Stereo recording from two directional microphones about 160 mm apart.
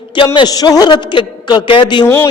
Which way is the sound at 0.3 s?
25° left (ahead or behind).